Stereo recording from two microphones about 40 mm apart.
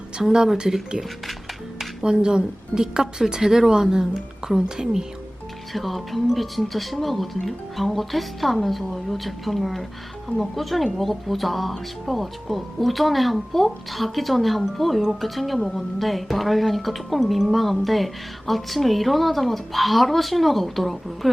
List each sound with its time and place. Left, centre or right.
0.2 s speech: centre
2.0 s speech: centre
5.7 s speech: centre